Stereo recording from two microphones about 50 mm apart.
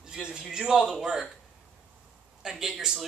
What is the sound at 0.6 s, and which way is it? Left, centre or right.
Speech, centre.